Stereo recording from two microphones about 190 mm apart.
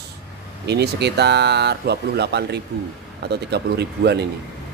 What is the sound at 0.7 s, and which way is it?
Speech, 60° right (ahead or behind).